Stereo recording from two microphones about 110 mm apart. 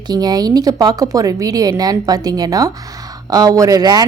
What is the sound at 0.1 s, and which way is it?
Speech, 35° right (ahead or behind).